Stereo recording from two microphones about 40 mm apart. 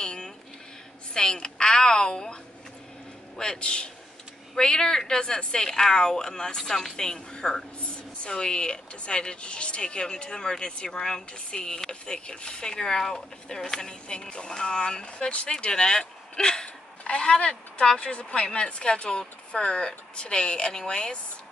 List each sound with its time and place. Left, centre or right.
0.0 s a sound: left
1.1 s a woman's voice: centre
3.5 s speech: left